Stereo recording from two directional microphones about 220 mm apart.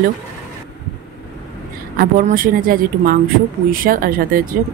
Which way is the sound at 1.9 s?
40° right (ahead or behind).